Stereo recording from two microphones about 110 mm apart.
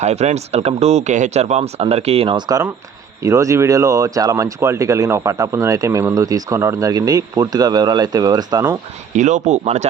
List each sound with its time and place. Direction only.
0.0 s speech: 90° right; by 2.3 s 65° right (ahead or behind)
2.3 s speech: 35° right (ahead or behind)
9.1 s speech: 90° right